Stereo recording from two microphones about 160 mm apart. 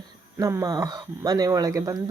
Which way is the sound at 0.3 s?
20° right (ahead or behind).